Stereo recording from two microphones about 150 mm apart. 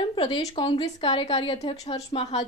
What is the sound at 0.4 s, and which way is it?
A woman's voice, 35° left (ahead or behind).